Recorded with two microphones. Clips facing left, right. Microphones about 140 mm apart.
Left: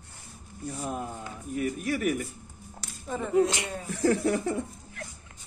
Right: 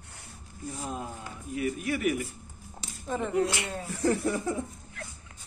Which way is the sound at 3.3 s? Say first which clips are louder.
Left 5 dB; 20° left (ahead or behind).